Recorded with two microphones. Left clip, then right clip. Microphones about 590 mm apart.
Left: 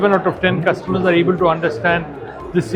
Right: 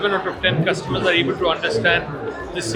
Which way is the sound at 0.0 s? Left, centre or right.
Left.